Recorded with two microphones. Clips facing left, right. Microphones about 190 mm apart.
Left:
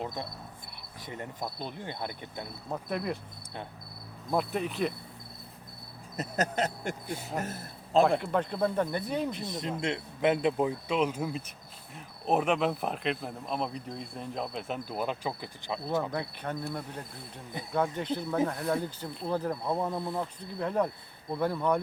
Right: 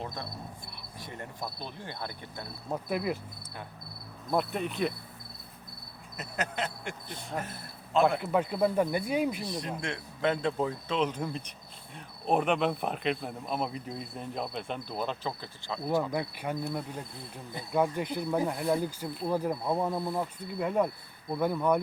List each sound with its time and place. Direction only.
0.0 s cricket: 20° left (ahead or behind)
2.6 s speech: 5° right (ahead or behind)
4.3 s speech: centre (ahead or behind)
6.1 s a sound: 40° left (ahead or behind)
7.1 s speech: 5° left (ahead or behind)
7.4 s a man's voice: 40° left (ahead or behind)
8.2 s speech: 5° right (ahead or behind)
9.4 s cricket: 20° left (ahead or behind)
9.8 s speech: 20° left (ahead or behind)
16.0 s speech: 10° right (ahead or behind)